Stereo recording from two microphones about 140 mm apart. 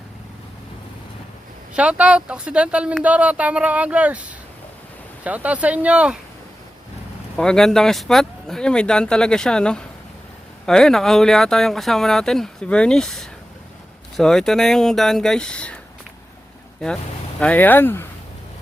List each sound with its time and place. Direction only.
1.7 s speech: 10° right (ahead or behind)
7.3 s speech: 5° left (ahead or behind)
17.4 s speech: 10° left (ahead or behind)